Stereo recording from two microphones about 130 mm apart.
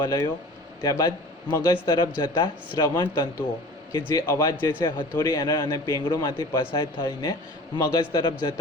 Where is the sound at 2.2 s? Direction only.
35° left (ahead or behind).